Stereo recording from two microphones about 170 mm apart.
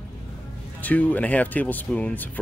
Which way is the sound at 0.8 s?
10° left (ahead or behind).